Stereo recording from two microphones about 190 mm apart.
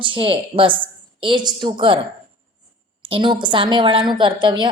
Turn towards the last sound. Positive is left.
turn(degrees=-25)  # may be behind; listen again after turning